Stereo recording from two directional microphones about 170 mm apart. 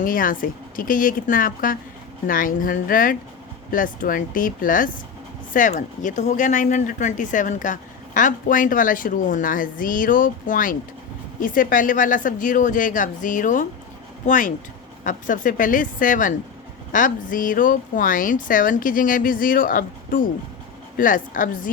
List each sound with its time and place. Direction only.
0.0 s speech: 55° left (ahead or behind)